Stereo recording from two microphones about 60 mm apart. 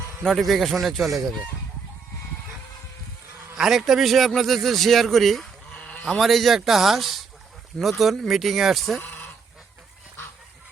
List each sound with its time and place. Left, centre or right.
0.3 s a man's voice: centre
3.6 s a man's voice: centre
5.8 s sheep: left
6.1 s a man's voice: centre